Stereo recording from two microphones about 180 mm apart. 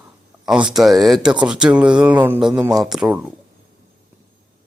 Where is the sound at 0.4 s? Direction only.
5° right (ahead or behind).